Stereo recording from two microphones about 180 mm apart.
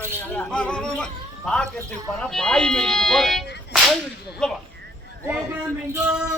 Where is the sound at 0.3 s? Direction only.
5° left (ahead or behind).